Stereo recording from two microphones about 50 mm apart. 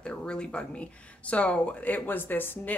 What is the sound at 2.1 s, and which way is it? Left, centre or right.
Speech, left.